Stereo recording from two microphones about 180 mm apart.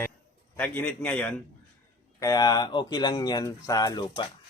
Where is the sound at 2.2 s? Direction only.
20° left (ahead or behind).